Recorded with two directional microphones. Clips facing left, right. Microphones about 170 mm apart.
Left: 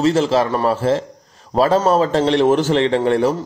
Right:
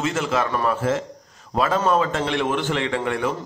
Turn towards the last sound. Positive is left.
turn(degrees=35)  # may be behind; listen again after turning